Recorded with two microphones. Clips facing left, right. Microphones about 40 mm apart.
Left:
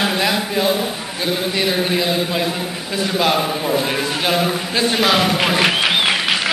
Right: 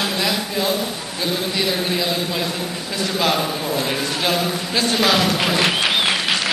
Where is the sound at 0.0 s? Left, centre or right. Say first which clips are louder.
Left 3 dB; centre.